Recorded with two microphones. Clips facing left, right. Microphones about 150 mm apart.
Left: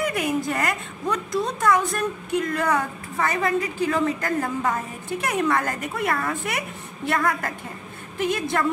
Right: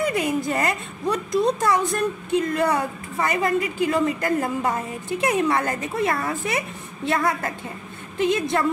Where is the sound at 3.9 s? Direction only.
20° right (ahead or behind).